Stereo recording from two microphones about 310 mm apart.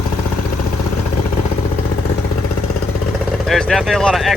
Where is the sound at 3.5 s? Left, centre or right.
Centre.